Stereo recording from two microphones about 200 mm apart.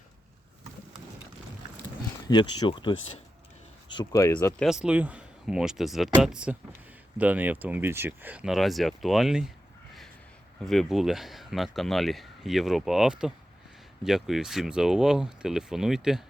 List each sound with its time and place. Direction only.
2.2 s speech: 20° left (ahead or behind)
4.6 s speech: 5° right (ahead or behind)
10.7 s speech: centre (ahead or behind)